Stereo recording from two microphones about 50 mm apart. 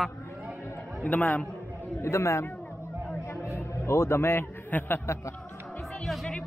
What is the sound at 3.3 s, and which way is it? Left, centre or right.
Music, left.